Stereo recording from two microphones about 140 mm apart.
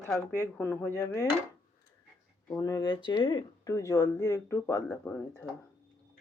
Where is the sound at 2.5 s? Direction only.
25° left (ahead or behind).